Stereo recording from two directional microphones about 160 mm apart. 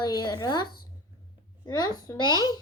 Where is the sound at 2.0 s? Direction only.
25° left (ahead or behind).